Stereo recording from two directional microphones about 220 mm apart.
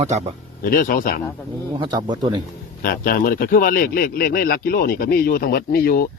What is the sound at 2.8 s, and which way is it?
Speech, 40° left (ahead or behind).